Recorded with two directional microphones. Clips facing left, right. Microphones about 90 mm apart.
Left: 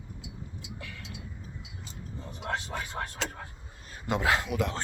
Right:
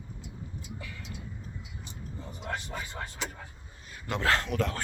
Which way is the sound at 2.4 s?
80° left.